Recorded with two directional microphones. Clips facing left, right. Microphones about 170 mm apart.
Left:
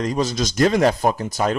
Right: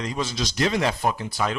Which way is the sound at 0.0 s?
45° left (ahead or behind).